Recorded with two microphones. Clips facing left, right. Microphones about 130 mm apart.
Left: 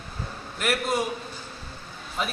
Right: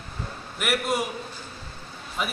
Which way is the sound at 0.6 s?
10° right (ahead or behind).